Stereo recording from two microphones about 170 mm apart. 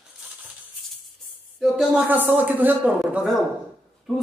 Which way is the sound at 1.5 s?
Centre (ahead or behind).